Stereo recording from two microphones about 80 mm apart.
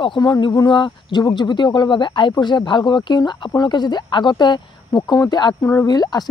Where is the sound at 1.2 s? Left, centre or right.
Left.